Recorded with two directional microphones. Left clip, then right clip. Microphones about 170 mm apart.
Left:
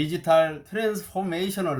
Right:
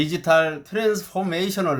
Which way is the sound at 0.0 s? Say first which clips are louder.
Right 2 dB; 25° right (ahead or behind).